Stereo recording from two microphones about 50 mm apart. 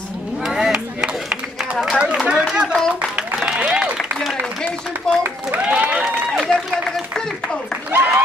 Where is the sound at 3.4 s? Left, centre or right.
Centre.